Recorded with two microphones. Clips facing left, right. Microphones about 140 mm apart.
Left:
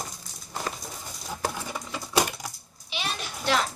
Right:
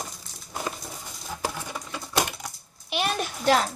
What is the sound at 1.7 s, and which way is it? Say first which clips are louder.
Typing: left 1 dB; 5° left (ahead or behind).